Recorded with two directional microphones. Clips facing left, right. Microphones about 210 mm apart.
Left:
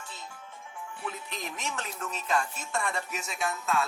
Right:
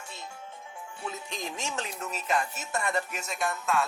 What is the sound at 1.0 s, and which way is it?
Speech, 25° right (ahead or behind).